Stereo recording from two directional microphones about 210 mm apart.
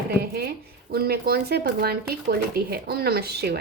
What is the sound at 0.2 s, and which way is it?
Speech, 50° right (ahead or behind).